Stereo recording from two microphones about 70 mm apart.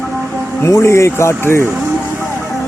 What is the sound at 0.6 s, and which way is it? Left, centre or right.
Speech, left.